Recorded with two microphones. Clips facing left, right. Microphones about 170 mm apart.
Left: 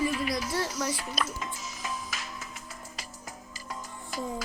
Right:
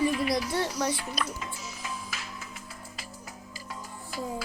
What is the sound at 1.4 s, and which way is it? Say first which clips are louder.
Music: left 1 dB; 45° left (ahead or behind).